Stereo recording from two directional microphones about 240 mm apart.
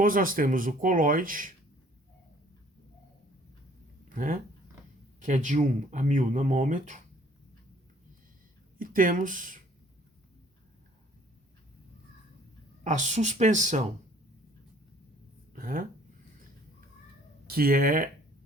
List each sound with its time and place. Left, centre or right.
0.0 s speech: right
4.1 s speech: right
8.8 s speech: right
12.8 s speech: right
15.5 s speech: right
17.4 s speech: right